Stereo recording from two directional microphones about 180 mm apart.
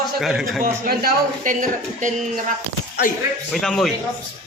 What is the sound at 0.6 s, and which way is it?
Speech, 55° right (ahead or behind).